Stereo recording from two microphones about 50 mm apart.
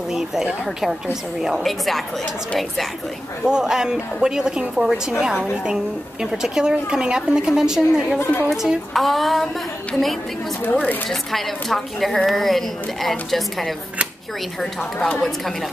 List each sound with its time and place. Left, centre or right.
0.1 s a woman's voice: centre
1.6 s a woman's voice: centre
3.4 s a woman's voice: centre
8.2 s a woman's voice: left
8.9 s a woman's voice: centre
11.1 s a woman's voice: centre
14.8 s a woman's voice: left